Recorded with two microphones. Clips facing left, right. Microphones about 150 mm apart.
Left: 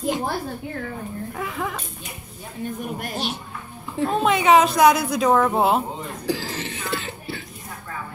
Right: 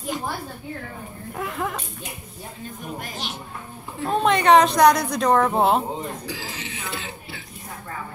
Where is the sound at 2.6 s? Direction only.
60° left (ahead or behind).